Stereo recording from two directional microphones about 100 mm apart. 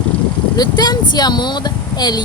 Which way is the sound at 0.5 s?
45° left (ahead or behind).